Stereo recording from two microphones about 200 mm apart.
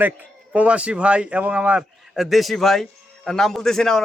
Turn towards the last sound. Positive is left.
turn(degrees=0)  # may be behind; listen again after turning